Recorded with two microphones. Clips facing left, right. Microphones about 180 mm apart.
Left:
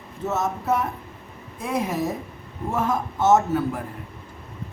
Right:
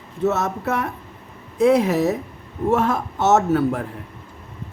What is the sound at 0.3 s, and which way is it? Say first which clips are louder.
Speech: right 2 dB; 70° right (ahead or behind).